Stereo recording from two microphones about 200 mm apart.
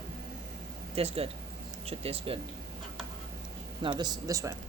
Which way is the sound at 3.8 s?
20° right (ahead or behind).